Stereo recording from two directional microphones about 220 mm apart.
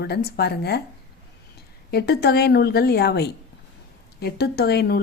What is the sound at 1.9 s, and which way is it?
Speech, 45° left (ahead or behind).